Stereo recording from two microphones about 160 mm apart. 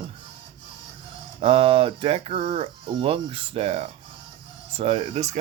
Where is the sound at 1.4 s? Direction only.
35° right (ahead or behind).